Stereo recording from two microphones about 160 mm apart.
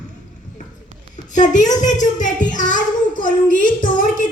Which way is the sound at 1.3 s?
50° left (ahead or behind).